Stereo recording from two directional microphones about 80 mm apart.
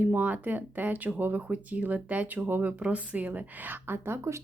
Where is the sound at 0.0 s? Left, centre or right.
Right.